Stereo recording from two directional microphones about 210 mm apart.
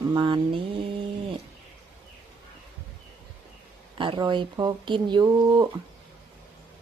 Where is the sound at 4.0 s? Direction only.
25° right (ahead or behind).